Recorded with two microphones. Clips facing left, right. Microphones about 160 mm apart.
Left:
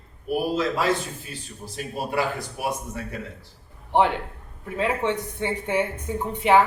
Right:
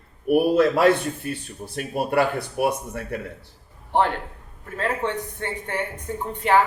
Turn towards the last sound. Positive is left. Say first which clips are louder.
# left 1 dB
turn(degrees=15)  # may be behind; listen again after turning